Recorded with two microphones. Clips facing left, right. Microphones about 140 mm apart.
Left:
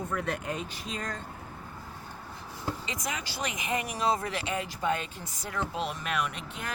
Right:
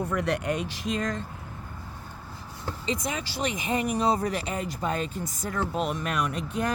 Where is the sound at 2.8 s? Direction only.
30° right (ahead or behind).